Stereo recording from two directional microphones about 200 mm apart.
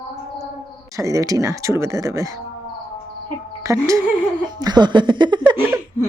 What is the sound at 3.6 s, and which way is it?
A woman's voice, 15° right (ahead or behind).